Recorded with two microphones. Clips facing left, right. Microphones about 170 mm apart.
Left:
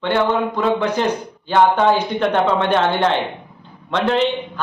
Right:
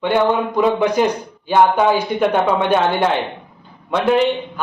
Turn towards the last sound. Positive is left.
turn(degrees=-10)  # may be behind; listen again after turning